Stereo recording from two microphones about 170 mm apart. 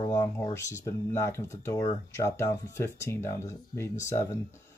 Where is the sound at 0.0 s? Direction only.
20° left (ahead or behind).